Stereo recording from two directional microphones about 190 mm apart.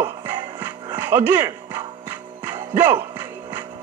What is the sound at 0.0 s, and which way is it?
Music, 10° right (ahead or behind).